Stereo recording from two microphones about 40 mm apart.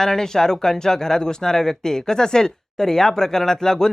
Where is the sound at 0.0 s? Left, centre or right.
Centre.